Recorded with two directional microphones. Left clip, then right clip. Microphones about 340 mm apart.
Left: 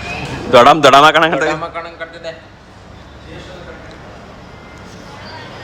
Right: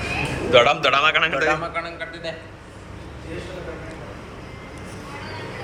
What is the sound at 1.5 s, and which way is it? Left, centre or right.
Speech, left.